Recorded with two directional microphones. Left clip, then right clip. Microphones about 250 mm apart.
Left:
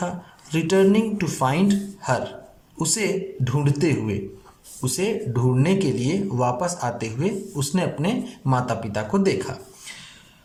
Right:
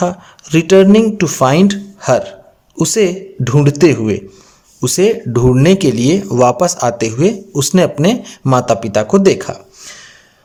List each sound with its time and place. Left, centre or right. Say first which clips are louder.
0.0 s speech: right 12 dB; right